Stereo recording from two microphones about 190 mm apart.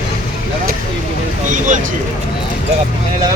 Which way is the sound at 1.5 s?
40° right (ahead or behind).